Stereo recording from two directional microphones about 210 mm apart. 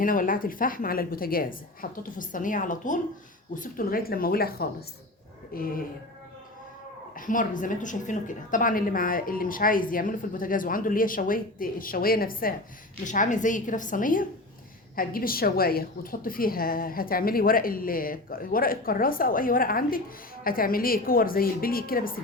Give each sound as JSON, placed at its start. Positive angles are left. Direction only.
{"t": 0.0, "sound": "a woman's voice", "side_deg": 40}
{"t": 7.2, "sound": "a woman's voice", "side_deg": 40}